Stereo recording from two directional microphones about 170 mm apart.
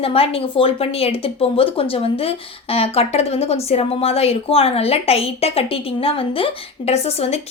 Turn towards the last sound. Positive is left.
turn(degrees=40)  # may be behind; listen again after turning